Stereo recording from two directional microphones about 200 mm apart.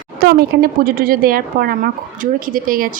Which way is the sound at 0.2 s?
50° right (ahead or behind).